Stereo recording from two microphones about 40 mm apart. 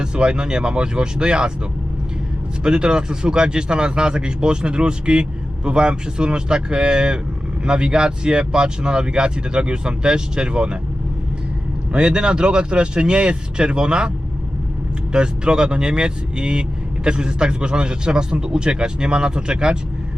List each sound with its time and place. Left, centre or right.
0.0 s speech: right
2.6 s speech: right
11.9 s speech: right
15.1 s speech: right